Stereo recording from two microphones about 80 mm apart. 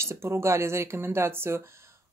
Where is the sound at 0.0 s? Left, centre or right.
Right.